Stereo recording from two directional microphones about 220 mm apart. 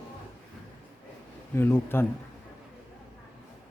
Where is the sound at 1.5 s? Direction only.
10° left (ahead or behind).